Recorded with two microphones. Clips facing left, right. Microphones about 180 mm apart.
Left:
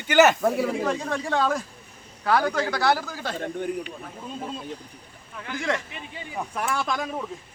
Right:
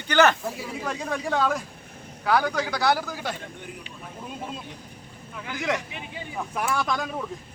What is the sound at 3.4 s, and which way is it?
Speech, 50° left (ahead or behind).